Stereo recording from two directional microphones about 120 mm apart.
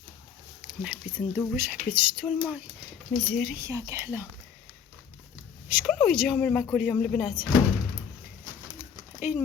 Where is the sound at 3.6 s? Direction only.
25° right (ahead or behind).